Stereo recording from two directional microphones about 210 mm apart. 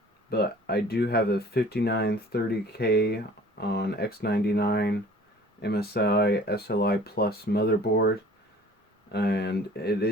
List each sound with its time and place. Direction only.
0.3 s speech: 50° left (ahead or behind)
9.1 s speech: 50° left (ahead or behind)